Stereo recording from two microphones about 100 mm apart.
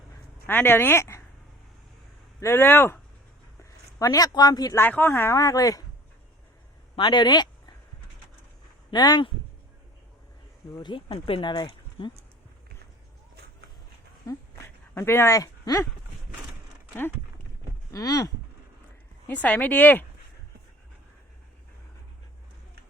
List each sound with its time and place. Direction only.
0.4 s speech: 20° left (ahead or behind)
2.4 s speech: 25° left (ahead or behind); by 4.7 s 40° left (ahead or behind)
4.7 s speech: 20° left (ahead or behind); by 5.8 s 35° left (ahead or behind)
6.9 s speech: 55° left (ahead or behind)
8.9 s speech: 45° left (ahead or behind)
10.8 s speech: 50° left (ahead or behind)
14.9 s speech: 25° left (ahead or behind)
17.9 s speech: 35° left (ahead or behind)
19.3 s speech: 15° left (ahead or behind)